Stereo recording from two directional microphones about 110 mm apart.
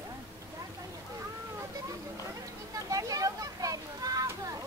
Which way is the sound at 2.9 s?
30° right (ahead or behind).